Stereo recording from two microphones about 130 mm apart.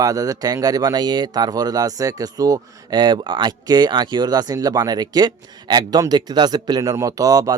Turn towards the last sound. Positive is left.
turn(degrees=-25)  # may be behind; listen again after turning